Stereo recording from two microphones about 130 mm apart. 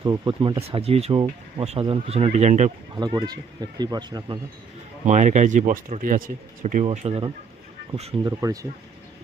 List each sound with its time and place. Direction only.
0.0 s speech: 40° right (ahead or behind); by 2.7 s 65° right (ahead or behind)
2.9 s speech: 35° right (ahead or behind)
5.0 s speech: 65° right (ahead or behind); by 6.8 s 90° right
6.8 s speech: 50° right (ahead or behind)
8.2 s speech: 25° right (ahead or behind)